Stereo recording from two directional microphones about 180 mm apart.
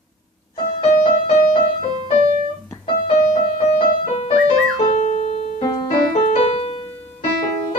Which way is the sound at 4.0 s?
35° left (ahead or behind).